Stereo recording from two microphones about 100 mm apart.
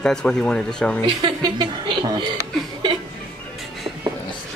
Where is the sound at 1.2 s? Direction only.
50° right (ahead or behind).